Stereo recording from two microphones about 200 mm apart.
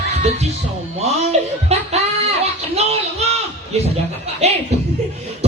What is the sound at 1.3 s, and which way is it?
Speech, 35° right (ahead or behind).